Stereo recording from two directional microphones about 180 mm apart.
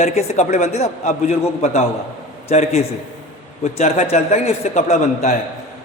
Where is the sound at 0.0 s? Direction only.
35° left (ahead or behind).